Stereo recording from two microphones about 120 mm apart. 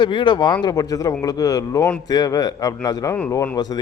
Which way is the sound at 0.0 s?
40° left (ahead or behind).